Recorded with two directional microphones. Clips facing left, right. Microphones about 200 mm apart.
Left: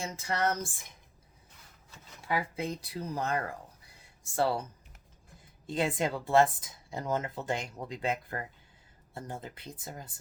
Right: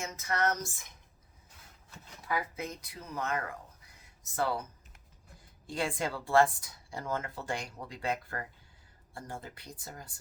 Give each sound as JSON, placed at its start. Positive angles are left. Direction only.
{"t": 0.0, "sound": "speech", "side_deg": 30}
{"t": 2.2, "sound": "speech", "side_deg": 30}
{"t": 5.6, "sound": "speech", "side_deg": 20}